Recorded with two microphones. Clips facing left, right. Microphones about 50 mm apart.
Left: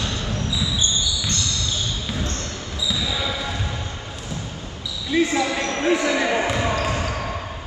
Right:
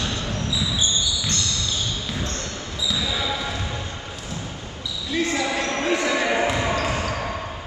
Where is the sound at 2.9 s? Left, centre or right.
Centre.